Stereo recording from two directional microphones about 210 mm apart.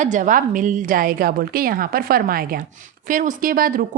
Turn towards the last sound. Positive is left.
turn(degrees=-45)  # may be behind; listen again after turning